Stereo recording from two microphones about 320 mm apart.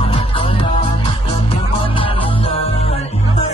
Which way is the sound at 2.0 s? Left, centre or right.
Centre.